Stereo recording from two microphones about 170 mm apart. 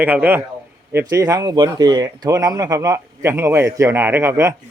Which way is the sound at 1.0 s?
20° right (ahead or behind).